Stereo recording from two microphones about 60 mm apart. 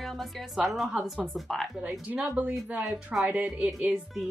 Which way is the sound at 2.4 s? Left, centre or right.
Right.